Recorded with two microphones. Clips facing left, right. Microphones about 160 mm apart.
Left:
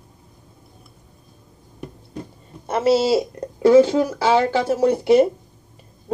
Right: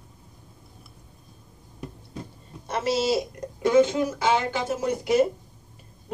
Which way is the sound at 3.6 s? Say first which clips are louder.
Left 7 dB; 35° left (ahead or behind).